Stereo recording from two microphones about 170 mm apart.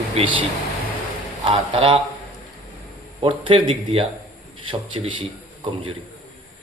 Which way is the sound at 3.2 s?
30° right (ahead or behind).